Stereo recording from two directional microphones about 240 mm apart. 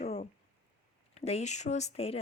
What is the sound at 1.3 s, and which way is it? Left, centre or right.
Speech, left.